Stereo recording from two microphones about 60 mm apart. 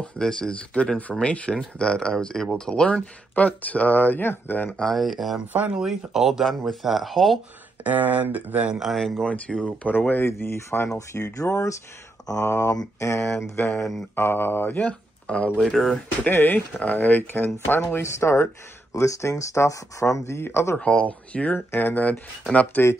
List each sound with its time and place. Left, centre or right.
0.0 s speech: centre; by 4.6 s left
4.6 s speech: centre
7.8 s speech: right
8.7 s speech: centre
9.2 s speech: centre
9.9 s speech: left
11.0 s speech: left
15.2 s speech: centre
15.6 s speech: centre
16.3 s speech: left
18.0 s speech: left
20.7 s speech: centre
21.5 s speech: left